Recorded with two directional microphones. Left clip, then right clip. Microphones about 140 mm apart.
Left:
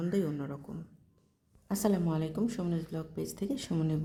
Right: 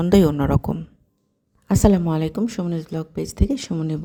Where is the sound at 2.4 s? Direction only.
45° right (ahead or behind).